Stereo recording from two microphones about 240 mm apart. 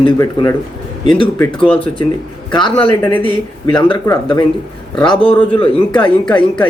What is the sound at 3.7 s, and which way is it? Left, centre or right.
Speech, centre.